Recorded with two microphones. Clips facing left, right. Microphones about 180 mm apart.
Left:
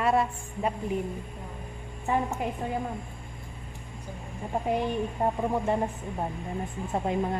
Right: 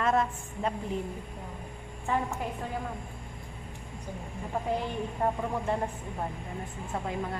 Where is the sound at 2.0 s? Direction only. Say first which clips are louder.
Left 3 dB; 20° left (ahead or behind).